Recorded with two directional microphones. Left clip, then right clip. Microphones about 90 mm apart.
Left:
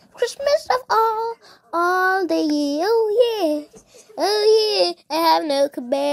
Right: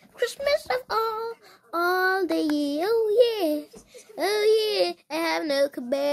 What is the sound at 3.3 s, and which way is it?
Speech, 20° left (ahead or behind).